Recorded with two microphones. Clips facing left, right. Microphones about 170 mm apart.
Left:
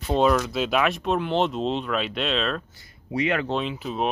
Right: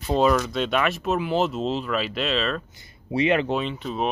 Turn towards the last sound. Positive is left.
turn(degrees=5)  # may be behind; listen again after turning